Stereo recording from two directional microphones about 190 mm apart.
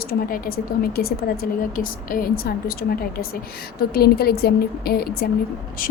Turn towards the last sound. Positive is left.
turn(degrees=45)  # may be behind; listen again after turning